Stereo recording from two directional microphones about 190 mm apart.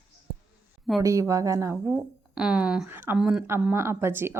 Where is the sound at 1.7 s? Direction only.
Centre (ahead or behind).